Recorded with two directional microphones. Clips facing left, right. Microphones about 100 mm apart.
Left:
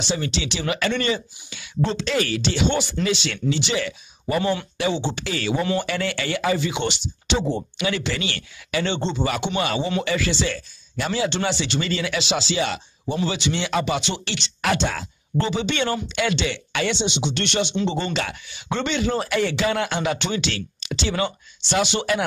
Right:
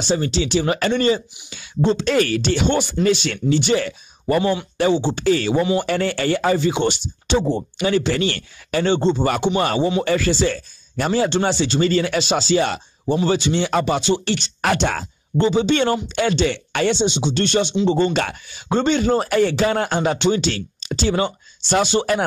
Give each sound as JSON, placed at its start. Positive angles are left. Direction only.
{"t": 0.0, "sound": "speech", "side_deg": -40}
{"t": 2.0, "sound": "speech", "side_deg": -50}
{"t": 4.4, "sound": "speech", "side_deg": -20}
{"t": 4.7, "sound": "speech", "side_deg": -45}
{"t": 15.3, "sound": "speech", "side_deg": -30}